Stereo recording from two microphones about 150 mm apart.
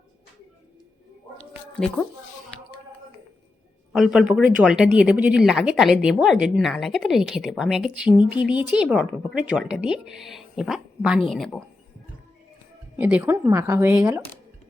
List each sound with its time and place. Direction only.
3.9 s a woman's voice: 5° right (ahead or behind)
13.0 s a woman's voice: 10° right (ahead or behind)